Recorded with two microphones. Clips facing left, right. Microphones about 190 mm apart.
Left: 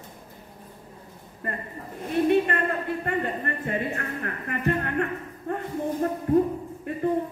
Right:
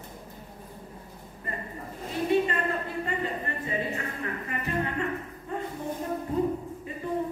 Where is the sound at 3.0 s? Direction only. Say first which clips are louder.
Left 4 dB; 60° left (ahead or behind).